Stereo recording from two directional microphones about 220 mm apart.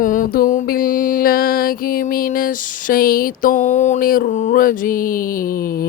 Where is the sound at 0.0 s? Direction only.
40° left (ahead or behind).